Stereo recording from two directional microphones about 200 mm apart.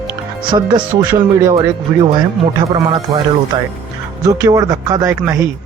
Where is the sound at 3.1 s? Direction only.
20° right (ahead or behind).